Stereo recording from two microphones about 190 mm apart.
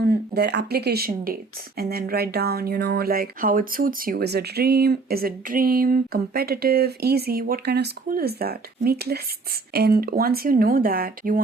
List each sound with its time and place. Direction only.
0.0 s speech: 55° right (ahead or behind)